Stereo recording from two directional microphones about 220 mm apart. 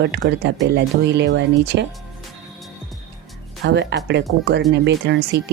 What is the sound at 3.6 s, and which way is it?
Speech, 50° right (ahead or behind).